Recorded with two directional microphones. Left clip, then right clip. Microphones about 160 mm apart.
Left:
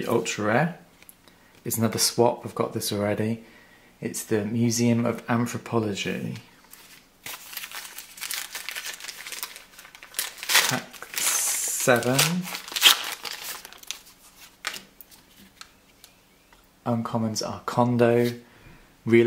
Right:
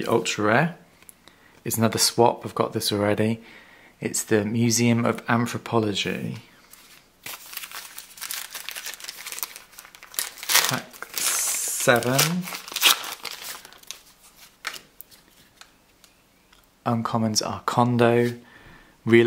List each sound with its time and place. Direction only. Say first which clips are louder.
0.0 s speech: right 3 dB; 25° right (ahead or behind)
7.2 s crumpling: even; 10° right (ahead or behind)
11.3 s mechanisms: even; 5° right (ahead or behind)
12.0 s crumpling: right 1 dB; 10° right (ahead or behind)
16.8 s speech: right 3 dB; 30° right (ahead or behind)